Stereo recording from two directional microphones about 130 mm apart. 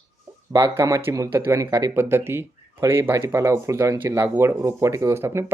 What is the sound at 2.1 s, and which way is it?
Speech, 20° right (ahead or behind).